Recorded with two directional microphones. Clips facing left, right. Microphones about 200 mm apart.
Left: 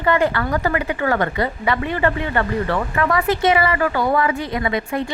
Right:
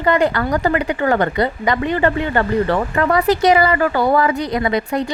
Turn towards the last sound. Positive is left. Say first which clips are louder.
# right 3 dB
turn(degrees=-35)  # may be behind; listen again after turning